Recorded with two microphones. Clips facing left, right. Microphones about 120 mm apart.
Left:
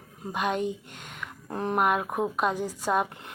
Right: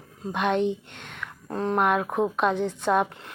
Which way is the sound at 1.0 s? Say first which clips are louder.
Left 1 dB; 15° left (ahead or behind).